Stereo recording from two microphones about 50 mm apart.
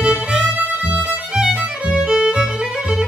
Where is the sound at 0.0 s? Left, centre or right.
Right.